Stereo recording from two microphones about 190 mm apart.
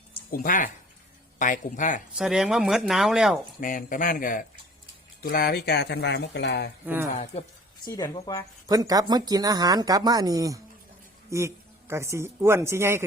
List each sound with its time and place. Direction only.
0.3 s speech: 45° left (ahead or behind)
2.1 s speech: centre (ahead or behind)
3.6 s speech: 45° left (ahead or behind); by 6.7 s 65° left (ahead or behind)
6.8 s speech: 10° right (ahead or behind)
7.9 s speech: 20° left (ahead or behind)
8.6 s speech: 20° right (ahead or behind)